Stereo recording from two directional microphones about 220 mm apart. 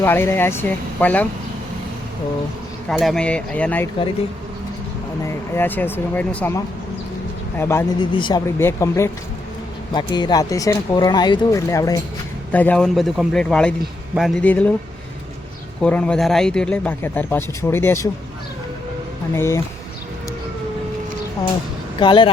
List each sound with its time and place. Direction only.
0.0 s speech: 10° left (ahead or behind)
2.9 s speech: centre (ahead or behind)
5.5 s speech: 10° left (ahead or behind)
7.6 s speech: 10° left (ahead or behind)
15.8 s speech: 5° left (ahead or behind)
19.3 s speech: 10° left (ahead or behind)
21.9 s speech: 20° left (ahead or behind)